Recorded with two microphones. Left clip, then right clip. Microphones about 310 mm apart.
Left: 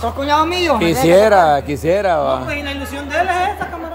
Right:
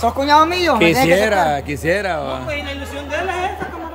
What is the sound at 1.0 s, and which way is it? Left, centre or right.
Speech, centre.